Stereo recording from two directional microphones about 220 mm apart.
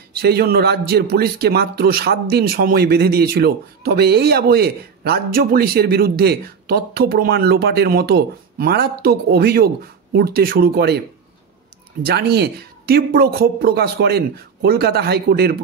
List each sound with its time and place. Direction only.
0.1 s a man's voice: 45° right (ahead or behind)
12.0 s a man's voice: 45° right (ahead or behind)